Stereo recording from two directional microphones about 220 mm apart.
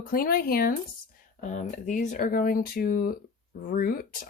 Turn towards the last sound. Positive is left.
turn(degrees=40)  # may be behind; listen again after turning